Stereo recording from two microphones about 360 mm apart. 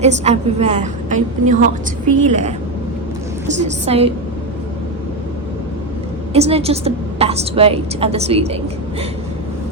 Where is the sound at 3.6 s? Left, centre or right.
Centre.